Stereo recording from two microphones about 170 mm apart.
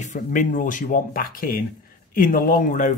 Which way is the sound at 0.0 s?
50° left (ahead or behind).